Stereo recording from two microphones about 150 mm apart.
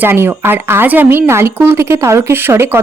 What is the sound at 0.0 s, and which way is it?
Speech, 15° right (ahead or behind).